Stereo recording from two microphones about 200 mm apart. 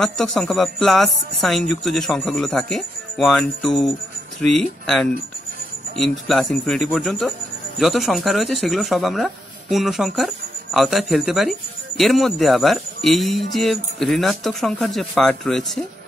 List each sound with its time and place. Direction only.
0.0 s speech: centre (ahead or behind)